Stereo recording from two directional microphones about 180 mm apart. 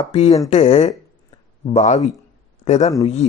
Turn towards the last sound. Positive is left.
turn(degrees=35)  # may be behind; listen again after turning